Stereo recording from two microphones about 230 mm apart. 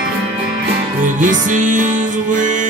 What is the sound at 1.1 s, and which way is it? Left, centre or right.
Music, right.